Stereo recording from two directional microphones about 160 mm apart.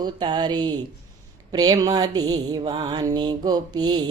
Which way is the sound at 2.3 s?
35° right (ahead or behind).